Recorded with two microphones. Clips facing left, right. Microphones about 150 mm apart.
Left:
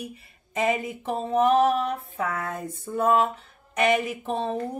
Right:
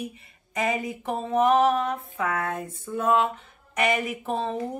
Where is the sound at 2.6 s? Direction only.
40° left (ahead or behind).